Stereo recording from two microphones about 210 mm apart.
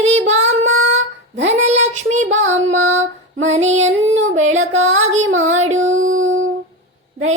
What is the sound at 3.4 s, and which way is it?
Music, 35° right (ahead or behind).